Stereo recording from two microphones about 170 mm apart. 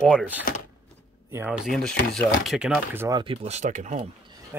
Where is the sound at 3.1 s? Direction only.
35° right (ahead or behind).